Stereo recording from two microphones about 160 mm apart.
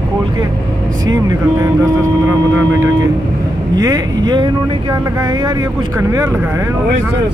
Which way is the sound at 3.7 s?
25° right (ahead or behind).